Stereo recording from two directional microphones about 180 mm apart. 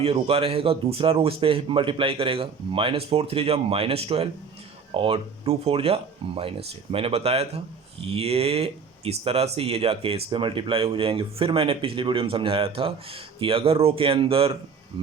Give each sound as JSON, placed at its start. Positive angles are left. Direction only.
{"t": 0.0, "sound": "speech", "side_deg": -35}